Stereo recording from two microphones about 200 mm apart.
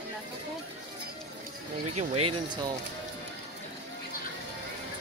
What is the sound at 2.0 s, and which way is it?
Speech, 30° right (ahead or behind).